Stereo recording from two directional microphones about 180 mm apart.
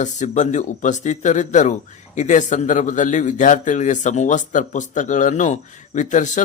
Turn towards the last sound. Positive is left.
turn(degrees=45)  # may be behind; listen again after turning